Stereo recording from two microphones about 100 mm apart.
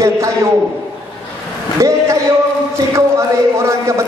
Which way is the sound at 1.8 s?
30° right (ahead or behind).